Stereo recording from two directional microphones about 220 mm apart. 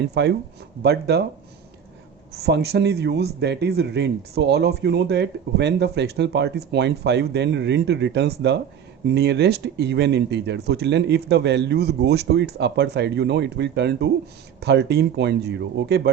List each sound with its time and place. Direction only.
0.0 s speech: 50° right (ahead or behind)
2.3 s speech: 45° right (ahead or behind)